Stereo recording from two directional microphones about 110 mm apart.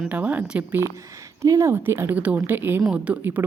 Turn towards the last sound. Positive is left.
turn(degrees=-15)  # may be behind; listen again after turning